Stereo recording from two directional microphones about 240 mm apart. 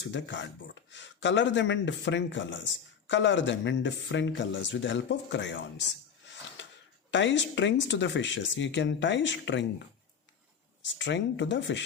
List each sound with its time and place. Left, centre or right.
0.1 s speech: left
7.1 s speech: left
10.9 s speech: left